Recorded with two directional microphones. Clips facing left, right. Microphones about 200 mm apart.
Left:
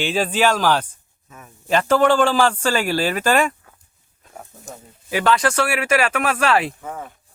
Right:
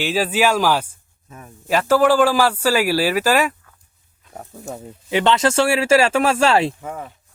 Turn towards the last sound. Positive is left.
turn(degrees=-20)  # may be behind; listen again after turning